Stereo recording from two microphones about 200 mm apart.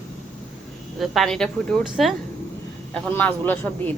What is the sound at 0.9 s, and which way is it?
A man's voice, centre (ahead or behind).